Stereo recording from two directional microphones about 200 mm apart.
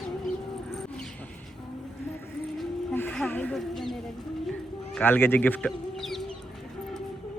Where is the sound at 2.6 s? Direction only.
10° left (ahead or behind).